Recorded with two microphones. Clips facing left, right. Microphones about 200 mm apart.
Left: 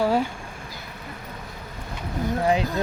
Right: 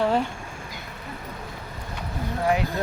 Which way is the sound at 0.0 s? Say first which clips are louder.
Left 1 dB; 5° left (ahead or behind).